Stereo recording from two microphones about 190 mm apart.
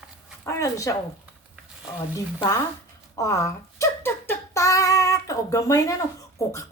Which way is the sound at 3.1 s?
15° left (ahead or behind).